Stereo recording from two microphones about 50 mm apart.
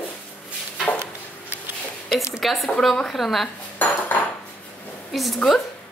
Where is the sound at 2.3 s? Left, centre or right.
Centre.